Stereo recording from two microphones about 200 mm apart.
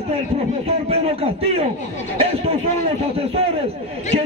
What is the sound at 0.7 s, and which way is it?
A man's voice, 30° right (ahead or behind).